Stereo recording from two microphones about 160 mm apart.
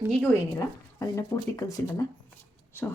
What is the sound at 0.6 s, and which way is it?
Speech, 20° left (ahead or behind).